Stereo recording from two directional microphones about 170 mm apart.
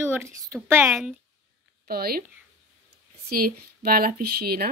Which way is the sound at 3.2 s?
60° right (ahead or behind).